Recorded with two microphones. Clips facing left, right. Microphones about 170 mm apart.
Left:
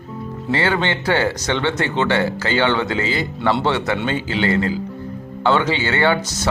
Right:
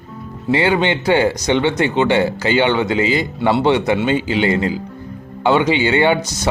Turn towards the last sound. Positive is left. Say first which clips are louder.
# right 2 dB
turn(degrees=-15)  # may be behind; listen again after turning